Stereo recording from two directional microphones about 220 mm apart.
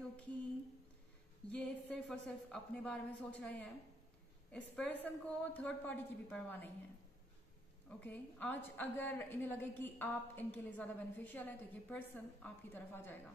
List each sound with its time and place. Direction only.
1.5 s a woman's voice: 5° left (ahead or behind)
8.0 s a woman's voice: 10° left (ahead or behind)